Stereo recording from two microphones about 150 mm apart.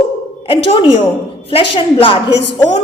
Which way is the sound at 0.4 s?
35° left (ahead or behind).